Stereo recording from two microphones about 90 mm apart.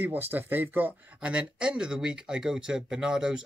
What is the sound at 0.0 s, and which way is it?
Speech, 20° right (ahead or behind).